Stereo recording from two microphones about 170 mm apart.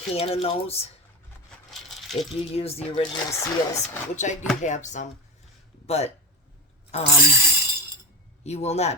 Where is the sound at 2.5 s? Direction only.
35° left (ahead or behind).